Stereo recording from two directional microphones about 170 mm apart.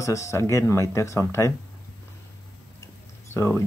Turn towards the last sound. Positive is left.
turn(degrees=15)  # may be behind; listen again after turning